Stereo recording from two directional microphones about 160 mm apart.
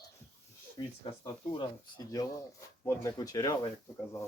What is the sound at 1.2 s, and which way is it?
Speech, 25° left (ahead or behind).